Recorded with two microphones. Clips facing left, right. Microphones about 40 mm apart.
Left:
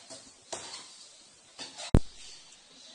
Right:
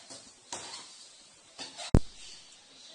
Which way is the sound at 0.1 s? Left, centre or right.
Centre.